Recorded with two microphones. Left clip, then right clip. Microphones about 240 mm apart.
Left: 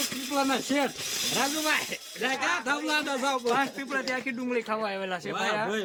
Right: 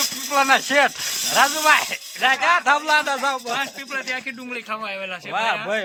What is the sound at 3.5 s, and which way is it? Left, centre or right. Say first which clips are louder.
A man's voice: right 2 dB; centre.